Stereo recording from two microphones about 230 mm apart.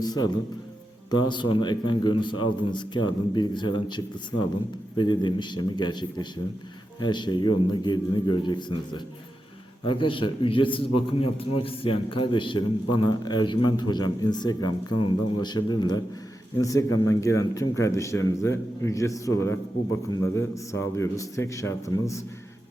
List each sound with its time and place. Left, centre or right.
0.0 s a man's voice: centre
9.8 s a man's voice: left